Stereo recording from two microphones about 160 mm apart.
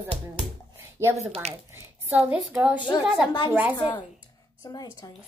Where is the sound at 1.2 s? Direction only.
40° right (ahead or behind).